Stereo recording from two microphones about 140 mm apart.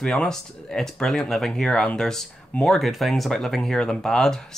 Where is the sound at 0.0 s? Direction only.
5° left (ahead or behind).